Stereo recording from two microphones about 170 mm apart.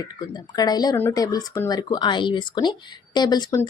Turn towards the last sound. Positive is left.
turn(degrees=20)  # may be behind; listen again after turning